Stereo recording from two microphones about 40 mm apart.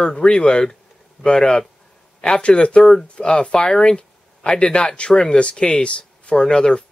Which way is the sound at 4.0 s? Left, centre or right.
Left.